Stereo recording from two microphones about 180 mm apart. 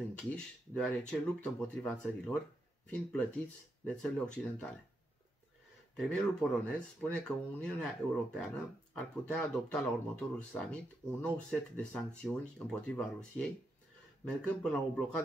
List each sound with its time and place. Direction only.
0.2 s speech: 5° left (ahead or behind)
5.9 s speech: 5° left (ahead or behind)